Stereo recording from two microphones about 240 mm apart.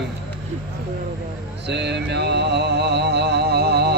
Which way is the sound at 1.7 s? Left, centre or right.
Right.